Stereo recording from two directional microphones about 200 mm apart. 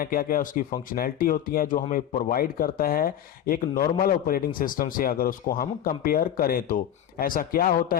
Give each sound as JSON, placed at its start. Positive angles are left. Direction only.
{"t": 0.0, "sound": "speech", "side_deg": 45}